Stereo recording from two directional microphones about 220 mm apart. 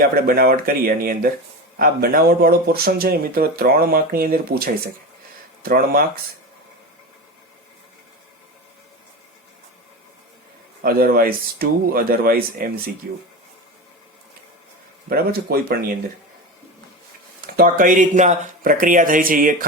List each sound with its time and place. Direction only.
0.0 s speech: 45° right (ahead or behind)
10.8 s speech: 40° right (ahead or behind)
15.1 s speech: 45° right (ahead or behind)
17.4 s speech: 40° right (ahead or behind)